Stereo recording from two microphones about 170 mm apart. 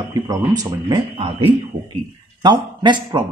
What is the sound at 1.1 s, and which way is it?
A man's voice, 35° right (ahead or behind).